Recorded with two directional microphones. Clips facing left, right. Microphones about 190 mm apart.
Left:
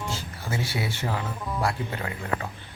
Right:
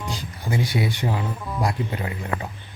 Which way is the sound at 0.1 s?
15° right (ahead or behind).